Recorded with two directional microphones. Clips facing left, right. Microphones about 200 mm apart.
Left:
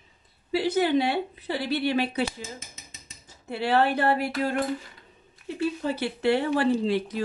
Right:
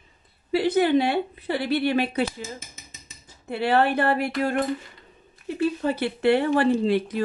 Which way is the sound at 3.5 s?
55° right (ahead or behind).